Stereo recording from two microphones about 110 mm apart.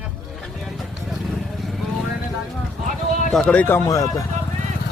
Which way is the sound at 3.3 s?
5° left (ahead or behind).